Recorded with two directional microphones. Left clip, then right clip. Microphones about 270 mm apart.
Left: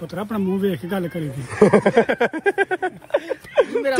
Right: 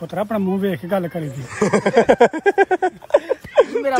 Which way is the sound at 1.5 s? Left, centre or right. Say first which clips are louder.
Left 2 dB; centre.